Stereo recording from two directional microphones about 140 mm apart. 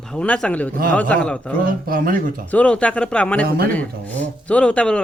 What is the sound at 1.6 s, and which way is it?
Speech, 90° right.